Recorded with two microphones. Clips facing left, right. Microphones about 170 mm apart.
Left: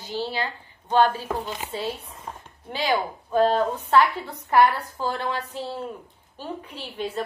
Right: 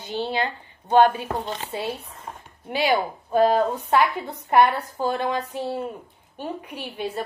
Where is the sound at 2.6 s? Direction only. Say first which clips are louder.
Right 3 dB; 10° right (ahead or behind).